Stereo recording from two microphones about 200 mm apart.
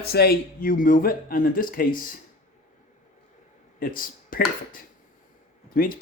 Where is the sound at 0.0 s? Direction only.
50° left (ahead or behind).